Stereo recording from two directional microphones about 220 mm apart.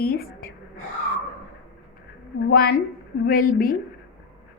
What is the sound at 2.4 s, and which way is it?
A woman's voice, 45° left (ahead or behind).